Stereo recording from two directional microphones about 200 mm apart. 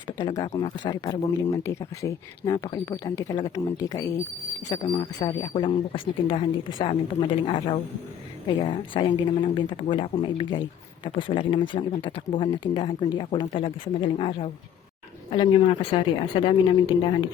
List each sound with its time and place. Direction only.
0.2 s speech: 20° left (ahead or behind)